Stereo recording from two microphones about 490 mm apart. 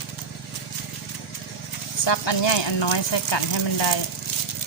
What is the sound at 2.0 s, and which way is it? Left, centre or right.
Speech, left.